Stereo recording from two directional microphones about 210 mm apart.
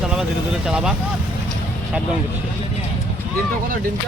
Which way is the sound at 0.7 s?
5° right (ahead or behind).